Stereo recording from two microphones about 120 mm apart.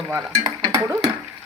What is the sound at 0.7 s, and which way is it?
Stir, 25° right (ahead or behind).